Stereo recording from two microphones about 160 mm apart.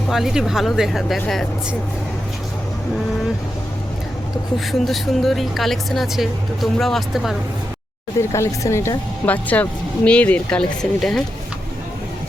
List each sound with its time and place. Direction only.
0.1 s speech: 5° right (ahead or behind)
4.9 s speech: centre (ahead or behind)
8.3 s speech: 20° left (ahead or behind)